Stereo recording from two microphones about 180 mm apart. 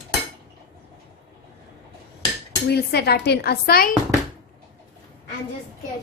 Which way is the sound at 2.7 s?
65° left (ahead or behind).